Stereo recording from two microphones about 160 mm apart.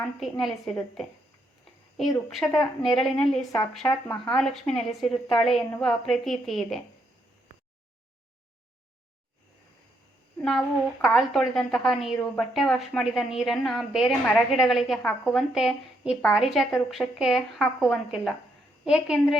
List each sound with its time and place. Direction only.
0.2 s a woman's voice: centre (ahead or behind)
11.0 s a woman's voice: centre (ahead or behind)